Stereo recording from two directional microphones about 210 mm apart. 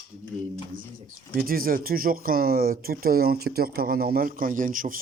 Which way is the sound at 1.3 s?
45° right (ahead or behind).